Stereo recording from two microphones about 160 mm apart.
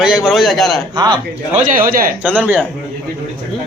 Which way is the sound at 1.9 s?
65° right (ahead or behind).